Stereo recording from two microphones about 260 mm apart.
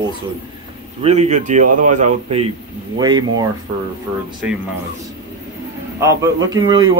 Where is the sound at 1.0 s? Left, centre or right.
Right.